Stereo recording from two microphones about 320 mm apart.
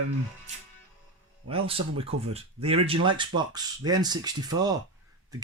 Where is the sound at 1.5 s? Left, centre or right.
Centre.